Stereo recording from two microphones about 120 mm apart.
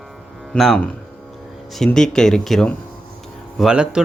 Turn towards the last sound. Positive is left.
turn(degrees=-10)  # may be behind; listen again after turning